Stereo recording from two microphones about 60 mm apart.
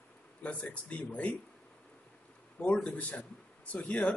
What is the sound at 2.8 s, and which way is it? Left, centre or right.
A man's voice, left.